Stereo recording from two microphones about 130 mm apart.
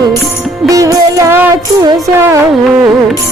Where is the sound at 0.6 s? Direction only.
25° right (ahead or behind).